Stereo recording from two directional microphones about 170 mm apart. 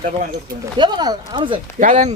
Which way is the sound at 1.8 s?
45° right (ahead or behind).